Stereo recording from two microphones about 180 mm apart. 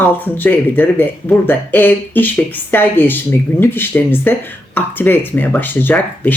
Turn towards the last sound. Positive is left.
turn(degrees=10)  # may be behind; listen again after turning